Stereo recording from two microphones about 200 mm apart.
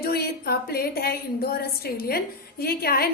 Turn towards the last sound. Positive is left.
turn(degrees=50)  # may be behind; listen again after turning